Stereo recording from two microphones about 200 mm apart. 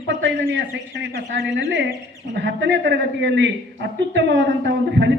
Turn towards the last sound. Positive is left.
turn(degrees=-60)  # may be behind; listen again after turning